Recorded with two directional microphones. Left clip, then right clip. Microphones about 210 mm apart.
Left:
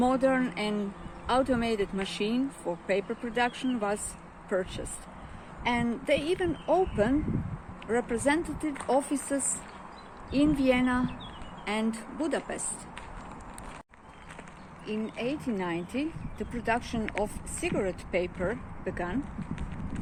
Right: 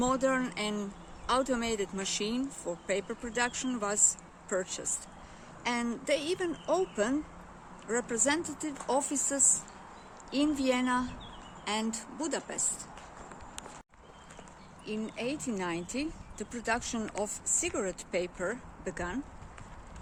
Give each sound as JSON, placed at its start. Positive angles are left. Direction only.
{"t": 0.0, "sound": "speech", "side_deg": 0}
{"t": 14.8, "sound": "speech", "side_deg": -10}